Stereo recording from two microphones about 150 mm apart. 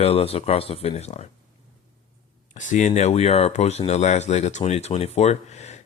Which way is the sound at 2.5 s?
55° left (ahead or behind).